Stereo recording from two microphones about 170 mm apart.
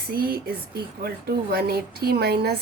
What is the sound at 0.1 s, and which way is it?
Speech, 60° right (ahead or behind).